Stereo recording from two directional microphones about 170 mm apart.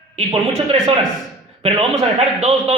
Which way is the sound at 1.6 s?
35° right (ahead or behind).